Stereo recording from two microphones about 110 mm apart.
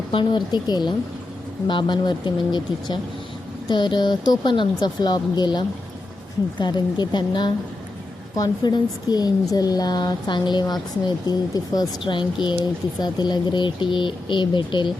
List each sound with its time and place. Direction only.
0.1 s speech: 45° left (ahead or behind)